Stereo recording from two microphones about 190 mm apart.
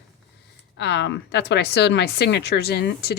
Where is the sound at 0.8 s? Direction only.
65° left (ahead or behind).